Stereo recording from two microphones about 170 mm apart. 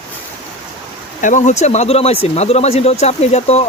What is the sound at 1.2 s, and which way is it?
Speech, 45° left (ahead or behind).